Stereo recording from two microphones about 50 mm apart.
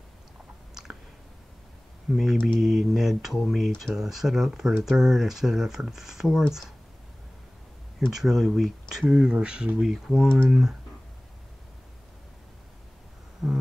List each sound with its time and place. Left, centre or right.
2.0 s speech: centre
8.1 s speech: centre
9.1 s speech: centre
9.8 s speech: centre
10.2 s speech: centre
13.4 s a sound: centre